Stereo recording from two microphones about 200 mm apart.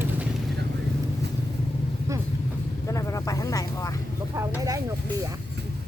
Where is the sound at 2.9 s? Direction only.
15° left (ahead or behind).